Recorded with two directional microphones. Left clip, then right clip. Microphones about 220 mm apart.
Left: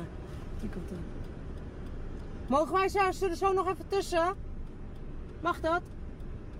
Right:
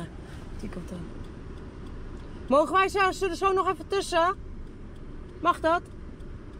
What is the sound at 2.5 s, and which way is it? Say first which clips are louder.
Speech: right 5 dB; 25° right (ahead or behind).